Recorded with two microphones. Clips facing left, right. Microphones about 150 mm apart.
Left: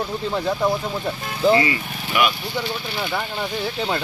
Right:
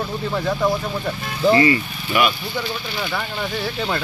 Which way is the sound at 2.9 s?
25° left (ahead or behind).